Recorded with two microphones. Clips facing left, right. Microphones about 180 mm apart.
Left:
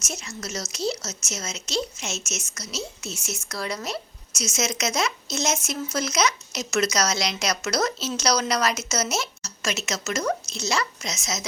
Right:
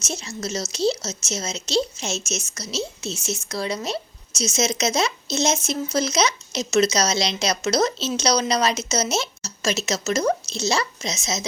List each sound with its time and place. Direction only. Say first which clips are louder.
0.0 s speech: right 5 dB; 30° right (ahead or behind)